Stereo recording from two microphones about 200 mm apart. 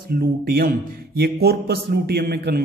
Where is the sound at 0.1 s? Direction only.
45° right (ahead or behind).